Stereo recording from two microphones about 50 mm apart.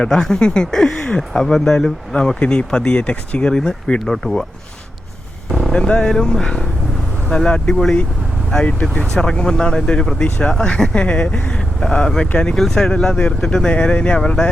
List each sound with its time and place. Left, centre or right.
0.0 s speech: centre
5.5 s vehicle: centre
6.0 s speech: centre
11.8 s speech: centre
12.3 s speech: left
12.5 s speech: centre